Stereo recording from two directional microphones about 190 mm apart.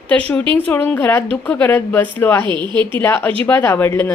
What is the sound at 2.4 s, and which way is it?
Speech, 25° right (ahead or behind).